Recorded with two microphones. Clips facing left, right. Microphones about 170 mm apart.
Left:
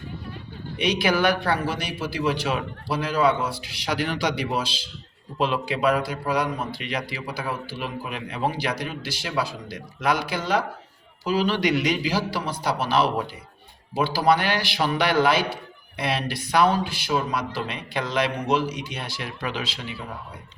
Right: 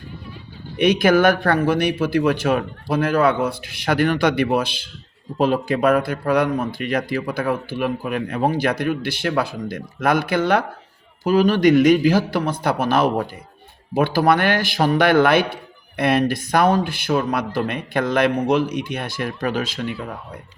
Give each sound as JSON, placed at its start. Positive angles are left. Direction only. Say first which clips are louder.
{"t": 0.8, "sound": "a man's voice", "louder": "right 7 dB", "side_deg": -50}